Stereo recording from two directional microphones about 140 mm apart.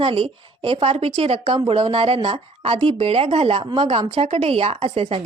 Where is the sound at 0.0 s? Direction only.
40° right (ahead or behind).